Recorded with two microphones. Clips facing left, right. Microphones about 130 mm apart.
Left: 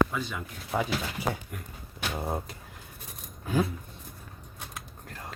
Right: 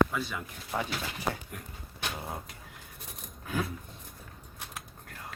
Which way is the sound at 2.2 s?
30° left (ahead or behind).